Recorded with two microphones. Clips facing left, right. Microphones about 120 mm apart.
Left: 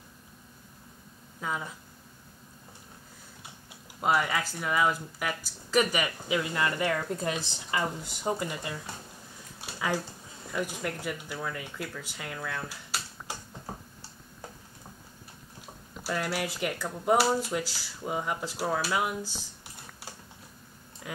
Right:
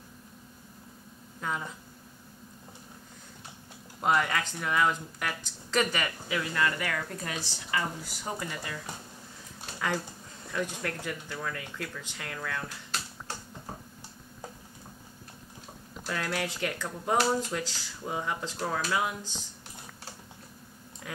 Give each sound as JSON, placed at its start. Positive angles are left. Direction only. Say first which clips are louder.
{"t": 1.4, "sound": "speech", "louder": "even", "side_deg": 5}
{"t": 4.0, "sound": "speech", "louder": "even", "side_deg": 5}
{"t": 9.6, "sound": "a sound", "louder": "left 1 dB", "side_deg": 10}
{"t": 10.5, "sound": "speech", "louder": "left 1 dB", "side_deg": 10}
{"t": 15.9, "sound": "speech", "louder": "left 2 dB", "side_deg": 5}